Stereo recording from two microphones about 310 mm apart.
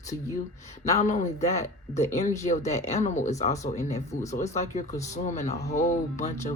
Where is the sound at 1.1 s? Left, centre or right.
Left.